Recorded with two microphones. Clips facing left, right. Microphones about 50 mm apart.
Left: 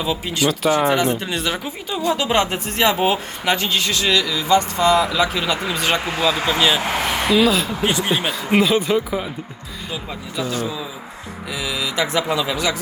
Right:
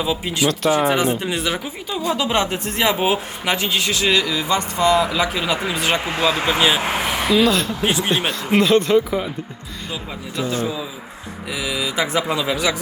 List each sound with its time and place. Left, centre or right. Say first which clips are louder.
0.0 s speech: even; centre
1.5 s speech: even; centre
2.3 s speech: left 2 dB; left
3.0 s speech: left 1 dB; centre; by 5.3 s right
5.3 s speech: even; centre
6.9 s speech: even; centre
7.9 s speech: even; centre
8.5 s speech: right 2 dB; centre
10.4 s a man's voice: right 2 dB; right
11.5 s speech: right 1 dB; centre